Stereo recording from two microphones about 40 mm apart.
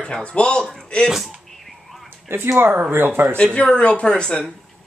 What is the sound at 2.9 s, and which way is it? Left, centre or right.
Speech, right.